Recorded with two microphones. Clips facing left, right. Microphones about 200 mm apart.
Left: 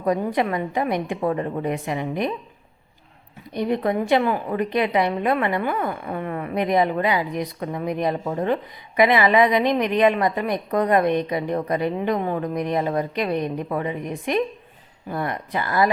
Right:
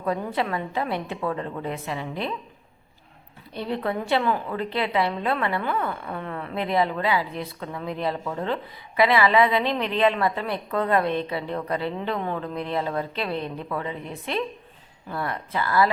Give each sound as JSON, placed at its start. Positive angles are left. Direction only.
{"t": 0.0, "sound": "a woman's voice", "side_deg": 15}
{"t": 3.5, "sound": "a woman's voice", "side_deg": 15}